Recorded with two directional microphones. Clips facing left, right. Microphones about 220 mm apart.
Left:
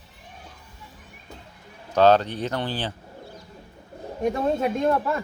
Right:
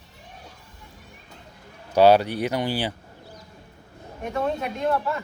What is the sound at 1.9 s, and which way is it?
A man's voice, 10° right (ahead or behind).